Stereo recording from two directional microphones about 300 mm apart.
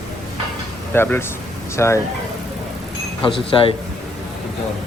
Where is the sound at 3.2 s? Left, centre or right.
Centre.